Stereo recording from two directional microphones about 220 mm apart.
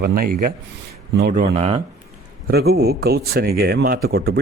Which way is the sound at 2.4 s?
45° right (ahead or behind).